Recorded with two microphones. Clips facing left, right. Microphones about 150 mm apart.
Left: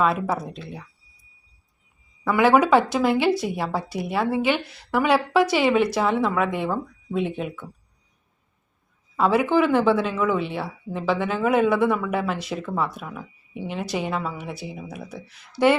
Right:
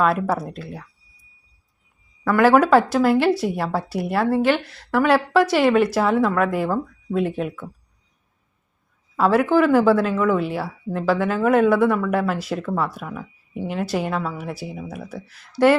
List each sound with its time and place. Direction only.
0.0 s speech: centre (ahead or behind)
2.2 s speech: centre (ahead or behind)
9.1 s speech: centre (ahead or behind)